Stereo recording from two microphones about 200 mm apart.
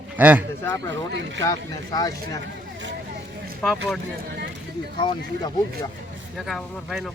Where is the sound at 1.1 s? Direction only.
60° right (ahead or behind).